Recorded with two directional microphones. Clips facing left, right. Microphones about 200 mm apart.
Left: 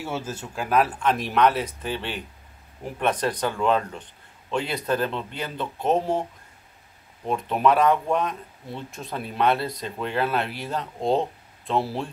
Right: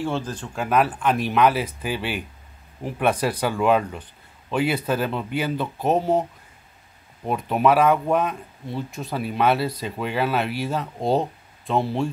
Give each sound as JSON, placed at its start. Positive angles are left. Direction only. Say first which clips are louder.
{"t": 0.0, "sound": "speech", "louder": "right 4 dB", "side_deg": 5}
{"t": 7.2, "sound": "speech", "louder": "right 2 dB", "side_deg": -5}